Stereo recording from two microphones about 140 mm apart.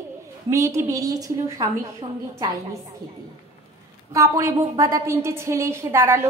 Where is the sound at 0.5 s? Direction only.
20° right (ahead or behind).